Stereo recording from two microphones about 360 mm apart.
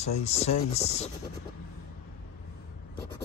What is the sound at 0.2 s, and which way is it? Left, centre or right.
Speech, centre.